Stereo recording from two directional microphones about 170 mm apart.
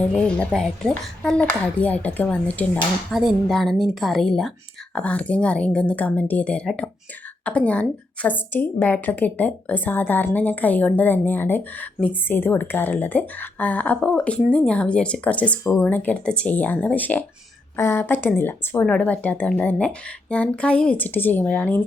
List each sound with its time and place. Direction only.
0.0 s a woman's voice: 5° left (ahead or behind)